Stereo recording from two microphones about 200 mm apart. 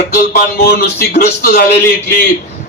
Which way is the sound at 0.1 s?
50° left (ahead or behind).